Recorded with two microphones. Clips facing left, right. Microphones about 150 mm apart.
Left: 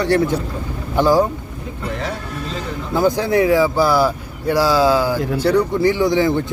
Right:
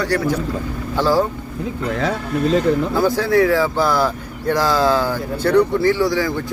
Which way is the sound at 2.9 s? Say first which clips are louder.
Left 4 dB; 15° left (ahead or behind).